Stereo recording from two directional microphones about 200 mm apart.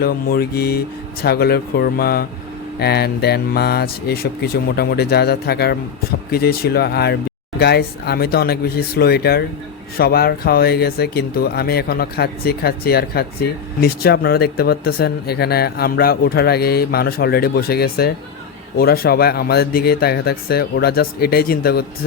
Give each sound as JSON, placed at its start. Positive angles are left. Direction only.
{"t": 0.0, "sound": "speech", "side_deg": 50}